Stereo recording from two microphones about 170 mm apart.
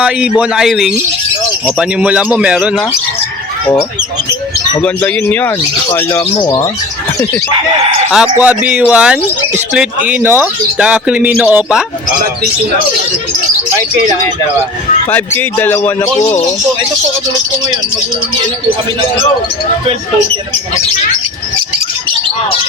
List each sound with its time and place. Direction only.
0.0 s a man's voice: 5° right (ahead or behind)
4.8 s a man's voice: 10° left (ahead or behind)
6.4 s speech: 20° left (ahead or behind)
8.1 s speech: 5° right (ahead or behind)
15.1 s a man's voice: 10° left (ahead or behind)